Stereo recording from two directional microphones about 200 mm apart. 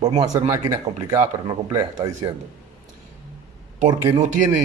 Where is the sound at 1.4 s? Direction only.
20° right (ahead or behind).